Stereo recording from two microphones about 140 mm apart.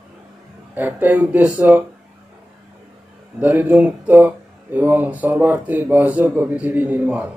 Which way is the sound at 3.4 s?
15° right (ahead or behind).